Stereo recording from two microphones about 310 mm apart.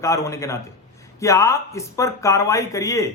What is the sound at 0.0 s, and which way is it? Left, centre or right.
A man's voice, centre.